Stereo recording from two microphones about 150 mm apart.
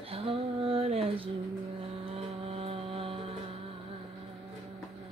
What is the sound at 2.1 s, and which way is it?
Vehicle, 40° right (ahead or behind).